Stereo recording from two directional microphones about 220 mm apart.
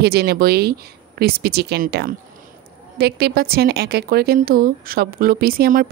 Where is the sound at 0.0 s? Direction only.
45° right (ahead or behind).